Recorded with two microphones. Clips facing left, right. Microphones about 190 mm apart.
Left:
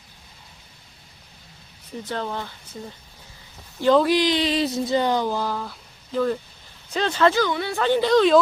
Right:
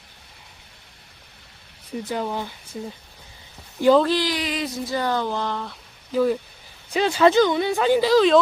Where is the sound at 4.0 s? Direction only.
15° left (ahead or behind).